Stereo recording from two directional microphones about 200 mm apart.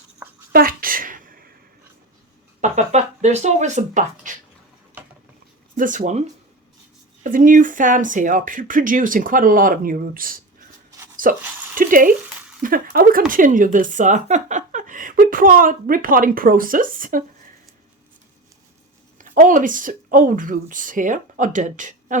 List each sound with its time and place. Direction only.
0.5 s a sound: 45° right (ahead or behind)
2.6 s speech: 35° right (ahead or behind)
5.7 s speech: 40° right (ahead or behind)
11.2 s a sound: 40° right (ahead or behind)
12.6 s speech: 45° right (ahead or behind)
19.2 s speech: 40° right (ahead or behind)